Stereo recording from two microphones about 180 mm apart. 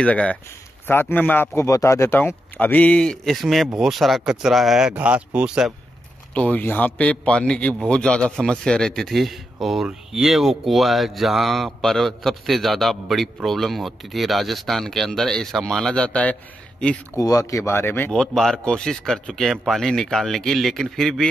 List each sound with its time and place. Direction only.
0.0 s a man's voice: 5° left (ahead or behind)
6.3 s a man's voice: 5° left (ahead or behind)
17.2 s a man's voice: 20° left (ahead or behind); by 21.3 s centre (ahead or behind)